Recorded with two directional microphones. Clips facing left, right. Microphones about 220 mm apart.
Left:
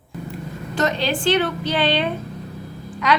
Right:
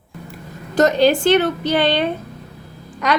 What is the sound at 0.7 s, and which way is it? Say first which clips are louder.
A woman's voice: right 8 dB; 45° right (ahead or behind).